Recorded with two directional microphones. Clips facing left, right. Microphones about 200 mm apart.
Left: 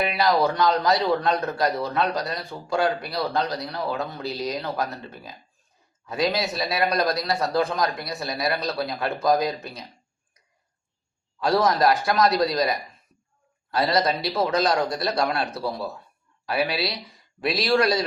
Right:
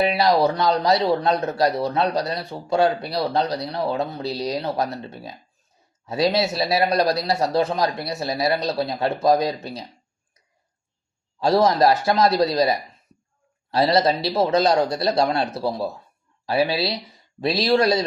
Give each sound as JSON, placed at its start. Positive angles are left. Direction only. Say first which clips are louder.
{"t": 0.2, "sound": "a man's voice", "louder": "right 2 dB", "side_deg": -20}
{"t": 11.3, "sound": "a man's voice", "louder": "right 3 dB", "side_deg": -25}